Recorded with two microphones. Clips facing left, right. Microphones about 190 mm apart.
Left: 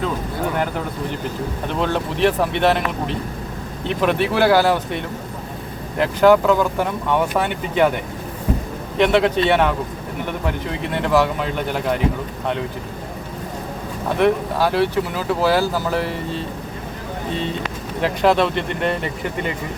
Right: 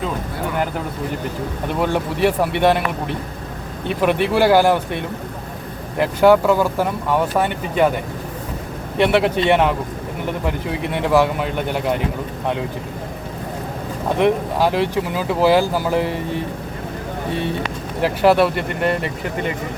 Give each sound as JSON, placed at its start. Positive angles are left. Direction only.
{"t": 1.8, "sound": "speech", "side_deg": -10}
{"t": 6.0, "sound": "speech", "side_deg": -10}
{"t": 9.0, "sound": "speech", "side_deg": -10}
{"t": 14.2, "sound": "speech", "side_deg": -15}
{"t": 18.0, "sound": "speech", "side_deg": -10}